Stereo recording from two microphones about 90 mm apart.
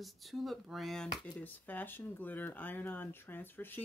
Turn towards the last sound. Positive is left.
turn(degrees=20)  # may be behind; listen again after turning